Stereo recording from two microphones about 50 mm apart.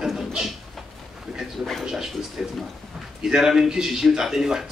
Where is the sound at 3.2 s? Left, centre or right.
Centre.